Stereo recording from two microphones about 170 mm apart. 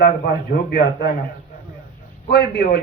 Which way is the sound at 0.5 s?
60° left (ahead or behind).